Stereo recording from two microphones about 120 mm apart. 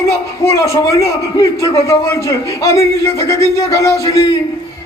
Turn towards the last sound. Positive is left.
turn(degrees=25)  # may be behind; listen again after turning